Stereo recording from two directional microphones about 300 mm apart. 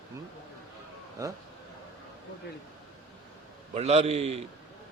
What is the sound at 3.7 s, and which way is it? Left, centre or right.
Speech, right.